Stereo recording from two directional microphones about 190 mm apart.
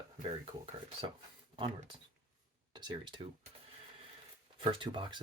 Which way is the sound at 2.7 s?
20° right (ahead or behind).